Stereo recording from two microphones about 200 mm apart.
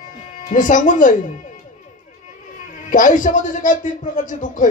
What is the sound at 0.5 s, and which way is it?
Speech, 40° left (ahead or behind).